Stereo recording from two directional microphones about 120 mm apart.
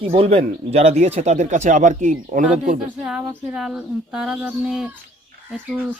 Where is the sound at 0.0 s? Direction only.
50° right (ahead or behind); by 2.7 s 90° right.